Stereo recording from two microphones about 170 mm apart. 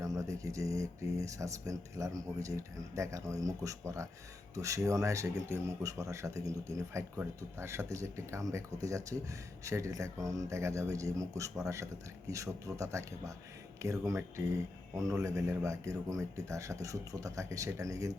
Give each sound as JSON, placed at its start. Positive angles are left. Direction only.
{"t": 0.0, "sound": "speech", "side_deg": -20}